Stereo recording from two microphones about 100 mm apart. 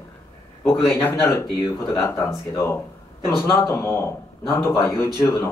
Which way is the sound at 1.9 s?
30° left (ahead or behind).